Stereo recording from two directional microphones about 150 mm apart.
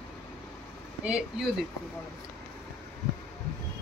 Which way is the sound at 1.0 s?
5° right (ahead or behind).